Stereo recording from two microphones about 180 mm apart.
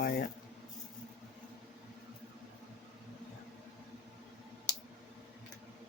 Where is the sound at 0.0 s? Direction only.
55° left (ahead or behind).